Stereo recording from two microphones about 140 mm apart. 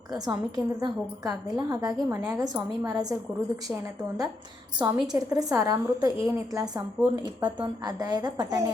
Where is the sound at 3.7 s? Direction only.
10° right (ahead or behind).